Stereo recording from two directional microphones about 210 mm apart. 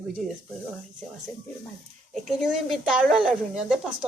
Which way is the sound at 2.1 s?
Centre (ahead or behind).